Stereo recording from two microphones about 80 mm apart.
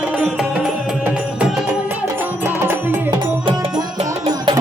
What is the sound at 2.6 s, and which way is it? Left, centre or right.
Music, right.